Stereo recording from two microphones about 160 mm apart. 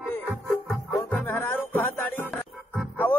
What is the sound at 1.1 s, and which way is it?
Music, 15° left (ahead or behind).